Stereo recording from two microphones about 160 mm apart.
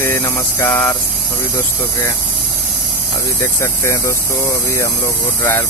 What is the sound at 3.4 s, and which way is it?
Speech, 20° left (ahead or behind).